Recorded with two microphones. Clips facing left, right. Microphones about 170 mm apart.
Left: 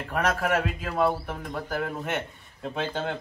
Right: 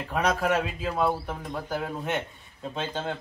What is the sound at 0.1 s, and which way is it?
A man's voice, centre (ahead or behind).